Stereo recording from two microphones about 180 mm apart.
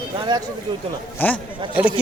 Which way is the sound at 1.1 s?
10° left (ahead or behind).